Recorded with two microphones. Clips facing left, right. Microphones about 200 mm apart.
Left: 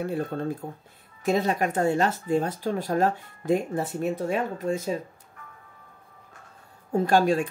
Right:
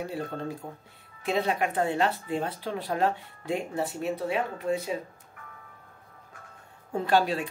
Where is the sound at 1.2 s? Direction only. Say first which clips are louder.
Left 3 dB; 45° left (ahead or behind).